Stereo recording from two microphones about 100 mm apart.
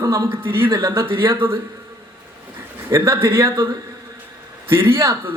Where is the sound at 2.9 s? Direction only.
25° right (ahead or behind).